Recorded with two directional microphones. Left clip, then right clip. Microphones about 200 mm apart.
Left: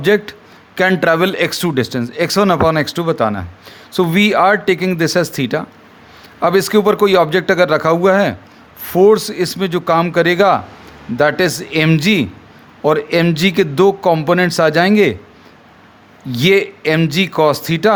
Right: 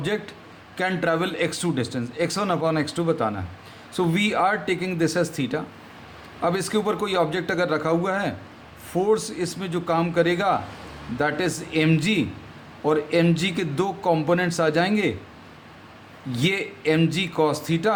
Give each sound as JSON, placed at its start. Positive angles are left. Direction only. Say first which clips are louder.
{"t": 0.0, "sound": "speech", "louder": "left 14 dB", "side_deg": 45}
{"t": 16.3, "sound": "speech", "louder": "left 12 dB", "side_deg": 45}